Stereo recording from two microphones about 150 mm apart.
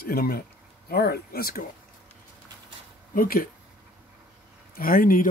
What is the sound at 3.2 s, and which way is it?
Speech, 70° left (ahead or behind).